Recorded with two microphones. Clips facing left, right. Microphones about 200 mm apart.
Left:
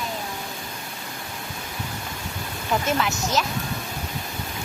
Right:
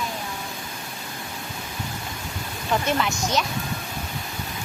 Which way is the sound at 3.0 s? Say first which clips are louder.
Even; centre (ahead or behind).